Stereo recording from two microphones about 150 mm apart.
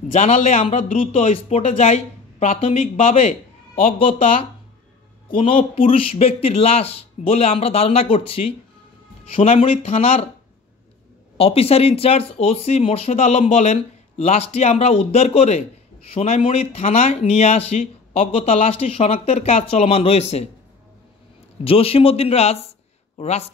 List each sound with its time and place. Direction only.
0.1 s a man's voice: 55° left (ahead or behind)
4.0 s a man's voice: 40° left (ahead or behind)
5.3 s a man's voice: 35° left (ahead or behind)
9.6 s a man's voice: 40° left (ahead or behind)
11.3 s speech: 40° left (ahead or behind)
21.6 s a man's voice: 40° left (ahead or behind)